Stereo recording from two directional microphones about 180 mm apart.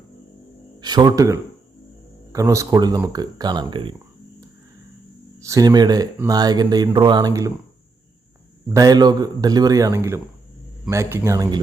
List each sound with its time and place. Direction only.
0.8 s speech: 25° right (ahead or behind)
5.4 s speech: 15° right (ahead or behind)
8.6 s speech: 20° right (ahead or behind)